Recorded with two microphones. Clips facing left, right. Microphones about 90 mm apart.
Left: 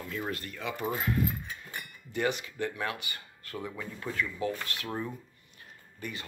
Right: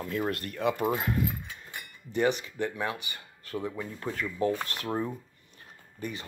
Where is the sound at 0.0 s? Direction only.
40° right (ahead or behind).